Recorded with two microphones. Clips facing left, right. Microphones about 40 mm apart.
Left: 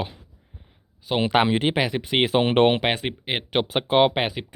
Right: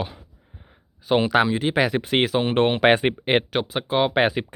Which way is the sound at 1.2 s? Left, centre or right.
Centre.